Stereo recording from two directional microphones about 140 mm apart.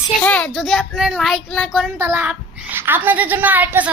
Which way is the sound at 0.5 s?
Centre (ahead or behind).